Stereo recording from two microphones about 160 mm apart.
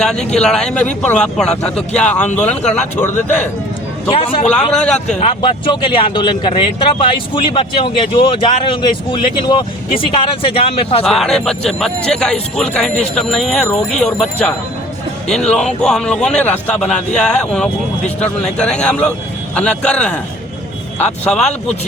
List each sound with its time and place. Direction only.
0.0 s a man's voice: 5° left (ahead or behind)
4.1 s speech: 35° left (ahead or behind)
4.7 s a man's voice: 5° left (ahead or behind)
5.4 s speech: 30° left (ahead or behind)
11.0 s a man's voice: centre (ahead or behind)